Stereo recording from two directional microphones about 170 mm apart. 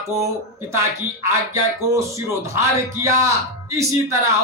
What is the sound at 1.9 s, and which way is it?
A man's voice, 15° right (ahead or behind).